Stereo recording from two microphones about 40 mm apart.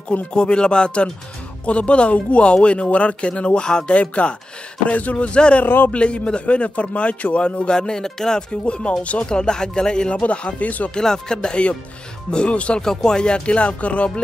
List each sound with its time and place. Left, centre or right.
0.3 s a man's voice: left
5.1 s a man's voice: left
8.5 s a man's voice: left
9.3 s a man's voice: centre
10.2 s speech: left
11.0 s a man's voice: centre
12.8 s a man's voice: centre; by 14.2 s left